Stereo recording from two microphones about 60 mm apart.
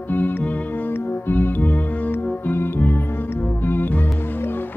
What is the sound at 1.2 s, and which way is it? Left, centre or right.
Music, left.